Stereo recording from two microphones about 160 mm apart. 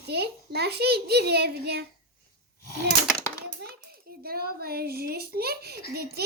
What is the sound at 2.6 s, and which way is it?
Speech, 75° left (ahead or behind).